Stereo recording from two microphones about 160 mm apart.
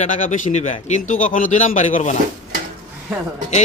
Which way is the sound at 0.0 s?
50° left (ahead or behind).